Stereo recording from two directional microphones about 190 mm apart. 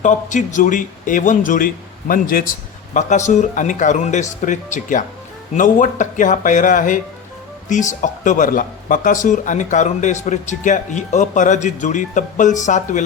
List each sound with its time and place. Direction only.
0.0 s speech: 40° left (ahead or behind)